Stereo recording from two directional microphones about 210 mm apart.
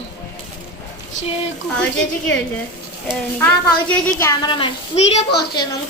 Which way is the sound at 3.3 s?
5° left (ahead or behind).